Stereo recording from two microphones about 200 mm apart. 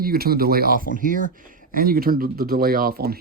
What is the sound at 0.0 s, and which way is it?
Speech, 50° right (ahead or behind).